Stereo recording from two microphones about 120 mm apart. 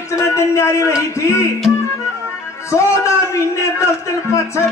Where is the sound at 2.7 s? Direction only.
25° left (ahead or behind).